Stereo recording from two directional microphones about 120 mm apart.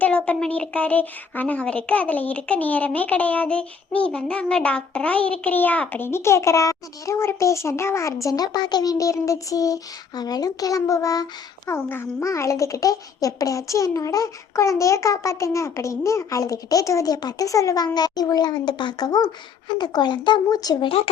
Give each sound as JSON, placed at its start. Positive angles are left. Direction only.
{"t": 0.0, "sound": "speech", "side_deg": 10}